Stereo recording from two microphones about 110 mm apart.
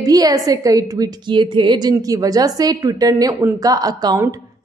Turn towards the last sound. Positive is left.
turn(degrees=-35)  # may be behind; listen again after turning